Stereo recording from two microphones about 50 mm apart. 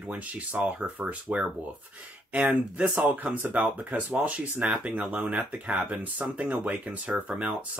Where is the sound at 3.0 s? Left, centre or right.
Right.